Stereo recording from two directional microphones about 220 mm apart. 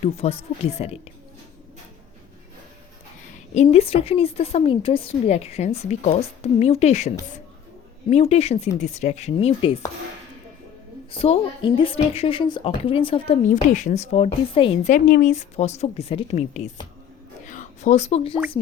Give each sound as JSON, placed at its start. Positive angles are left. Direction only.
{"t": 0.0, "sound": "a woman's voice", "side_deg": 30}
{"t": 3.5, "sound": "a woman's voice", "side_deg": 30}
{"t": 11.1, "sound": "a woman's voice", "side_deg": 25}
{"t": 17.4, "sound": "a sound", "side_deg": 35}